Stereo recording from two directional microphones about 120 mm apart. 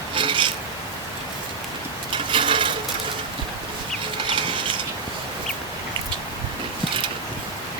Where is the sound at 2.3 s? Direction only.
45° right (ahead or behind).